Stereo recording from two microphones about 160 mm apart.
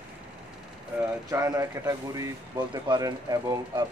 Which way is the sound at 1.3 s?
20° right (ahead or behind).